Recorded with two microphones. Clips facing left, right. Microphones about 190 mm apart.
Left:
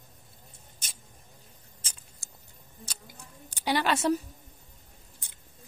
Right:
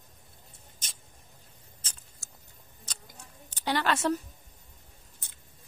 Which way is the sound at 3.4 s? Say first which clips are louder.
Left 1 dB; 10° left (ahead or behind).